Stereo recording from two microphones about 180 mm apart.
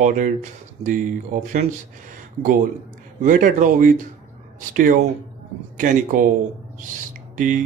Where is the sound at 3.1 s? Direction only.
45° right (ahead or behind).